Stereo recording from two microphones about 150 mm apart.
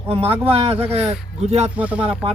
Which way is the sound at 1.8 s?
10° right (ahead or behind).